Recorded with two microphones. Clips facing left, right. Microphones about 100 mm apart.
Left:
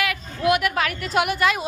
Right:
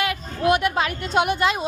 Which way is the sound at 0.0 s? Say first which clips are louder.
Right 1 dB; 30° right (ahead or behind).